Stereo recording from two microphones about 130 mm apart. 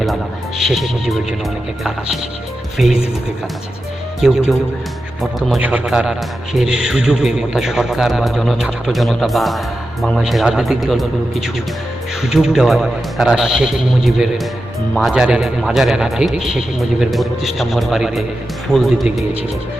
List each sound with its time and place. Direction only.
0.6 s a man's voice: centre (ahead or behind)
2.7 s a man's voice: centre (ahead or behind)
4.2 s a man's voice: 5° right (ahead or behind)